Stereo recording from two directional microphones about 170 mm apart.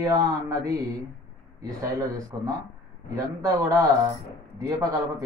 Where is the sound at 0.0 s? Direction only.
20° right (ahead or behind).